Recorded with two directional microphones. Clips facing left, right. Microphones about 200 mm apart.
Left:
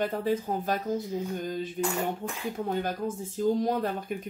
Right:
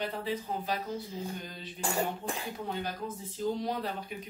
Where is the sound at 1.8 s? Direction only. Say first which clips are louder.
Even; 30° right (ahead or behind).